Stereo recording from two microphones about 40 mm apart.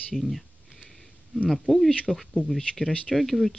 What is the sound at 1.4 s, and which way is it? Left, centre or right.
Speech, centre.